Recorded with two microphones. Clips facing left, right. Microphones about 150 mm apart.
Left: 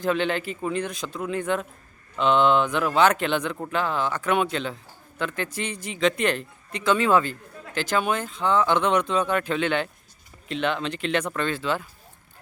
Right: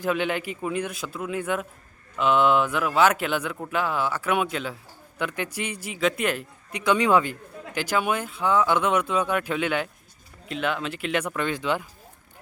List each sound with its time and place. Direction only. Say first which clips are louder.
0.0 s a man's voice: left 1 dB; 10° right (ahead or behind)